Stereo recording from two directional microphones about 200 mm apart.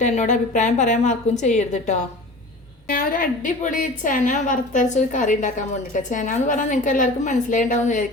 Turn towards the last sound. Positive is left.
turn(degrees=40)  # may be behind; listen again after turning